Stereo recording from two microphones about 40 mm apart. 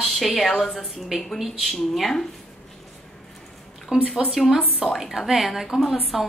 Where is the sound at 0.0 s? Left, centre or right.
Centre.